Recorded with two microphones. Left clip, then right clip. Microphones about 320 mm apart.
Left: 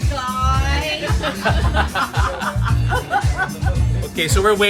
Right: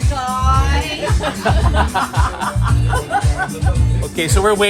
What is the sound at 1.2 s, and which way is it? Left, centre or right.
Music, centre.